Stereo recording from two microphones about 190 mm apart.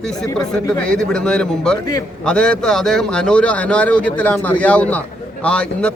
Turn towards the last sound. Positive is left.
turn(degrees=5)  # may be behind; listen again after turning